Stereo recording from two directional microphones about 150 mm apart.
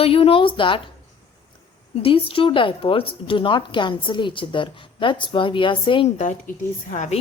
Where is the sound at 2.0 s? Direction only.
40° left (ahead or behind).